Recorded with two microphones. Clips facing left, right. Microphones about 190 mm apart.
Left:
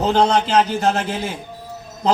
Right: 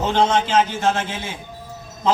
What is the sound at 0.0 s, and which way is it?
A man's voice, 35° left (ahead or behind).